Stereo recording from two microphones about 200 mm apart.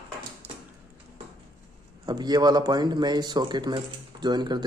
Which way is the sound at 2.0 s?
20° right (ahead or behind).